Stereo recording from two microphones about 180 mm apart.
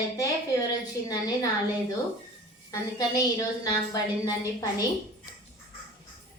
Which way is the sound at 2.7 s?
20° left (ahead or behind).